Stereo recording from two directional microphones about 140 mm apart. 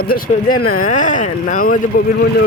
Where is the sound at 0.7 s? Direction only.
70° left (ahead or behind).